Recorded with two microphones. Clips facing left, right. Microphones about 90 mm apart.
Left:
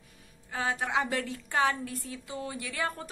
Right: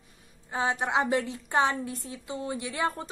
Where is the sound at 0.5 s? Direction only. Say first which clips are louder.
Right 3 dB; 20° right (ahead or behind).